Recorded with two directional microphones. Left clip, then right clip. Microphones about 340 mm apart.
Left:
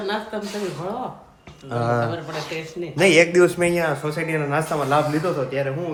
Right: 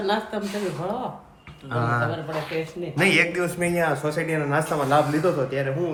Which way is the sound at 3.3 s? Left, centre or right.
Left.